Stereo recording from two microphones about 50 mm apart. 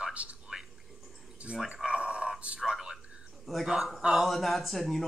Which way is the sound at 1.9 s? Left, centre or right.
Right.